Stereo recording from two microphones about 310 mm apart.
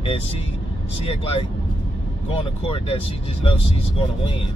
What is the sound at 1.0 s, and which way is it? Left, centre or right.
Speech, centre.